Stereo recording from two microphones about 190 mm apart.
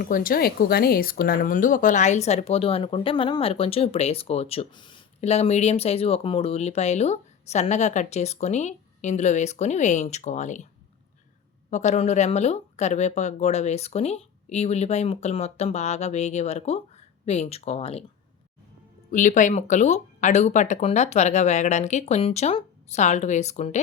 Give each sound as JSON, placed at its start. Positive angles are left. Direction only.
{"t": 0.0, "sound": "speech", "side_deg": 50}
{"t": 11.7, "sound": "speech", "side_deg": 40}
{"t": 19.1, "sound": "speech", "side_deg": 40}